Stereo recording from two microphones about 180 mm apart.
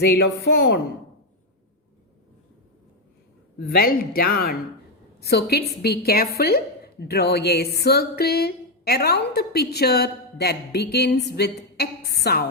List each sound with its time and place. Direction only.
0.0 s speech: 65° left (ahead or behind)
3.6 s a woman's voice: 55° left (ahead or behind)